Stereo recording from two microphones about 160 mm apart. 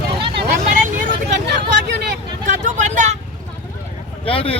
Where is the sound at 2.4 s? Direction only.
50° right (ahead or behind).